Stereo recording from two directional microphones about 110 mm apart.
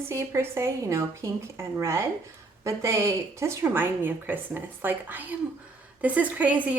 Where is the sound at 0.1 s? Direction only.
25° right (ahead or behind).